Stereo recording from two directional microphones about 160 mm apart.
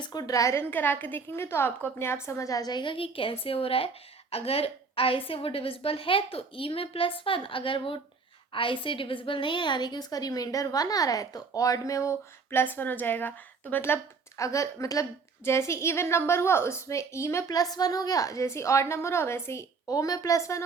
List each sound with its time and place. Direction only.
0.0 s a woman's voice: 25° left (ahead or behind)